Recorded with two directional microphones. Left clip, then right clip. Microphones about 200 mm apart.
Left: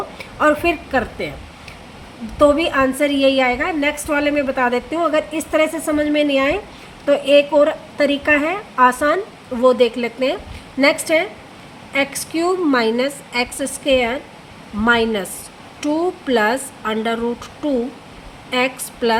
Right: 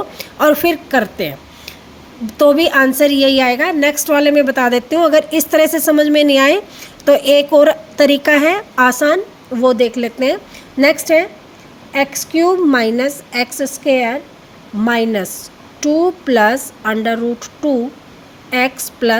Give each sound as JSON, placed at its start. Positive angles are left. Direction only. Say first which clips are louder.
{"t": 0.2, "sound": "speech", "louder": "right 4 dB", "side_deg": -35}
{"t": 2.4, "sound": "speech", "louder": "right 4 dB", "side_deg": -40}